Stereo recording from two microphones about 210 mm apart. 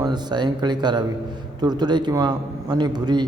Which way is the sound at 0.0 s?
20° right (ahead or behind).